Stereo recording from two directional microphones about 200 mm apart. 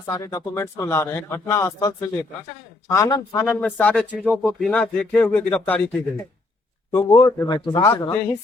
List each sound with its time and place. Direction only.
0.0 s a man's voice: 15° left (ahead or behind)